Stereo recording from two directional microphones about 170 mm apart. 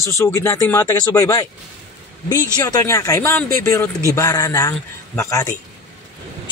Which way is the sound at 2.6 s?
20° left (ahead or behind).